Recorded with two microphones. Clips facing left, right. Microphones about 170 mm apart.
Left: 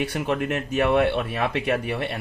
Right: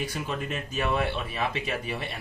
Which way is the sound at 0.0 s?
70° left (ahead or behind).